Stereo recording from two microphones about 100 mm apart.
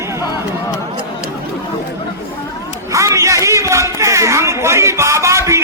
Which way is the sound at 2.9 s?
30° right (ahead or behind).